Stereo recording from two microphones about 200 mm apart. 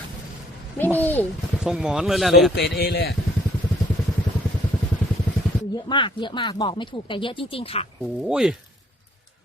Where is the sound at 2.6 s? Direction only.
55° left (ahead or behind).